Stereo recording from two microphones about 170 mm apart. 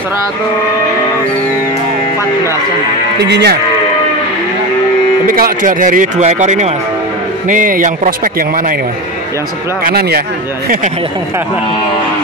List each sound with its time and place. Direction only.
3.2 s speech: 80° right
5.2 s speech: 55° right (ahead or behind)
9.8 s speech: 65° right (ahead or behind)